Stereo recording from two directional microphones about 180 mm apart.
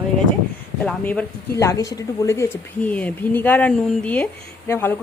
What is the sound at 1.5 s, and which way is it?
Speech, 20° left (ahead or behind).